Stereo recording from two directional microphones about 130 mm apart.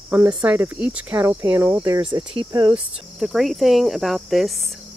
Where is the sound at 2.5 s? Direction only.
30° right (ahead or behind).